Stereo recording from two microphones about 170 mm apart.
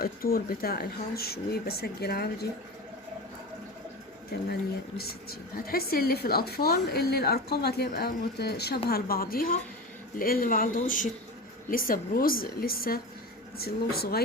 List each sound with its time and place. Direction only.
0.0 s speech: 60° left (ahead or behind)
4.9 s speech: 65° left (ahead or behind)